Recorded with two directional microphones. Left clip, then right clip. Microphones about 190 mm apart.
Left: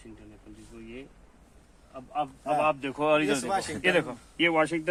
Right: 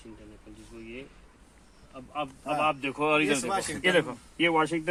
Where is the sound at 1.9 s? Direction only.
10° left (ahead or behind).